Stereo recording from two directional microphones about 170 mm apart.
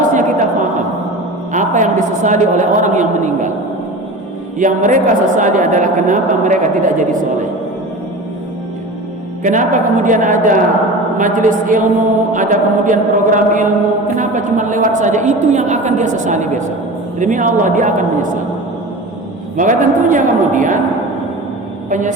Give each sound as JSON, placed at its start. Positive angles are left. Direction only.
{"t": 0.1, "sound": "music", "side_deg": -45}
{"t": 1.5, "sound": "a woman's voice", "side_deg": -45}
{"t": 4.5, "sound": "a woman's voice", "side_deg": -50}
{"t": 9.4, "sound": "a woman's voice", "side_deg": -50}
{"t": 19.5, "sound": "a woman's voice", "side_deg": -50}
{"t": 21.8, "sound": "a woman's voice", "side_deg": -50}